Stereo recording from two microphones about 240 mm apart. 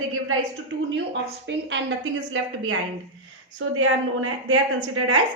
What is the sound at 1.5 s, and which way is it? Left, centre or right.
A woman's voice, right.